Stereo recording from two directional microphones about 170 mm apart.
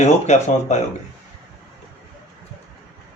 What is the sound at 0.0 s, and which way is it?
Speech, 40° left (ahead or behind).